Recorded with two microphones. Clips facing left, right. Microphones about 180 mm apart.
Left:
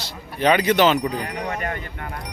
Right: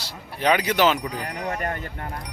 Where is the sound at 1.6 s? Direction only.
40° right (ahead or behind).